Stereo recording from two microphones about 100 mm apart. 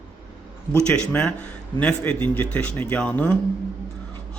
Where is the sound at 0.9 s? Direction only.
10° left (ahead or behind).